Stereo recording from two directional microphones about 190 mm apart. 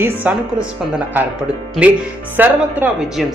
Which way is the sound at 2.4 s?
10° right (ahead or behind).